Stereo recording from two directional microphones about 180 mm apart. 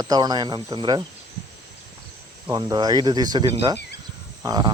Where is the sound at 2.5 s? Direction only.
20° right (ahead or behind).